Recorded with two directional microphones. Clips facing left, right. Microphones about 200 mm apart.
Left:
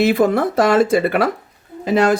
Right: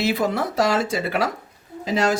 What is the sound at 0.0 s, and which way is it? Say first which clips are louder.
Speech: left 7 dB; 50° left (ahead or behind).